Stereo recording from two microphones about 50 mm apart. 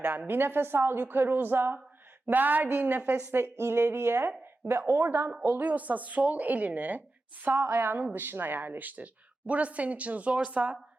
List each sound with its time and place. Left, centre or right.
0.0 s a woman's voice: right
3.2 s speech: right
5.4 s a woman's voice: right